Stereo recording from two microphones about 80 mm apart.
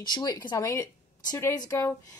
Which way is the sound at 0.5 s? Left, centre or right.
Left.